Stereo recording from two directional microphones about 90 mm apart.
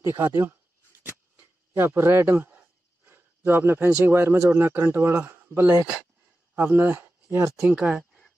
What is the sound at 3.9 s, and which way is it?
A man's voice, 25° right (ahead or behind).